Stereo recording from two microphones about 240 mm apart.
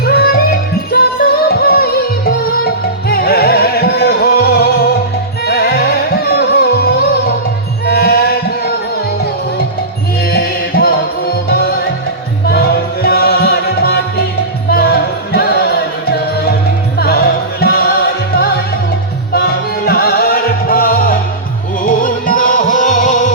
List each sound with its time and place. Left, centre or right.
0.0 s music: left
10.3 s music: left
17.0 s music: left